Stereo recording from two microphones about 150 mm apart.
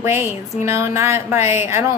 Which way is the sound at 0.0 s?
15° right (ahead or behind).